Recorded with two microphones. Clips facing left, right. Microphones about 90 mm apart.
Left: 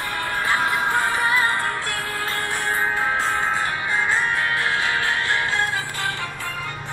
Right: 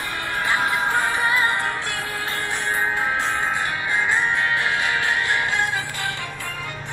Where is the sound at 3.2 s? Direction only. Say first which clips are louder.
Left 1 dB; 15° left (ahead or behind).